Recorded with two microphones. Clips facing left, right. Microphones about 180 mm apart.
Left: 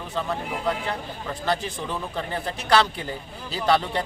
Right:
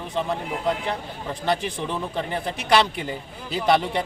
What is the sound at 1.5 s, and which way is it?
Speech, 20° right (ahead or behind).